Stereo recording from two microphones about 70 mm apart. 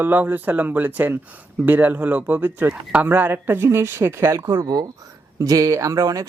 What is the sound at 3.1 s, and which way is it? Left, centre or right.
Speech, right.